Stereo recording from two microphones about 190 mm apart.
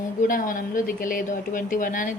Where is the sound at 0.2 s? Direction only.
45° left (ahead or behind).